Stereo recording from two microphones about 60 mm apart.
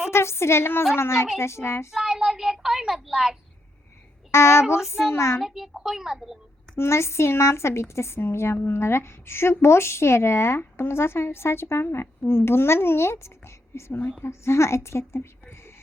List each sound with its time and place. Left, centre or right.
0.1 s speech: left
1.9 s child singing: centre
4.3 s speech: left
5.4 s a child's voice: centre
6.7 s speech: left